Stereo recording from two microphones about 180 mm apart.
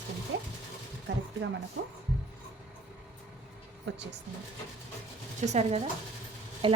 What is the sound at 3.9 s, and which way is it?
Speech, 75° right (ahead or behind).